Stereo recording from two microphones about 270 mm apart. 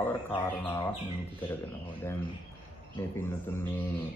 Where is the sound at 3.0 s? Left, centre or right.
Centre.